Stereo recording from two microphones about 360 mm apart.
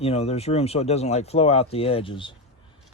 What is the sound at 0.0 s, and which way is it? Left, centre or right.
Speech, centre.